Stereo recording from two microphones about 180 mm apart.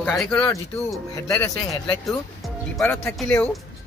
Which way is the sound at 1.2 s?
15° left (ahead or behind).